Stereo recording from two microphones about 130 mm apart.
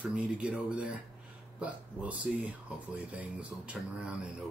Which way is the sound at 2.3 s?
5° right (ahead or behind).